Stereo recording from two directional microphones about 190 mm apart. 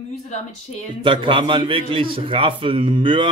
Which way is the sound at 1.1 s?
25° right (ahead or behind).